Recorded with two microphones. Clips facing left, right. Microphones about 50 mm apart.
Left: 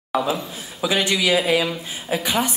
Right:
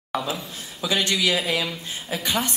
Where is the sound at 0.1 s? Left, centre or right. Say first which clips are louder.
Left 5 dB; centre.